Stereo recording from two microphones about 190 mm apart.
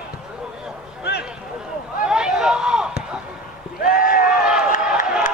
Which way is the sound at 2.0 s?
5° right (ahead or behind).